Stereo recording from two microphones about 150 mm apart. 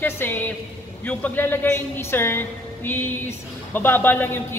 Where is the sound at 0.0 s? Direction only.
15° left (ahead or behind).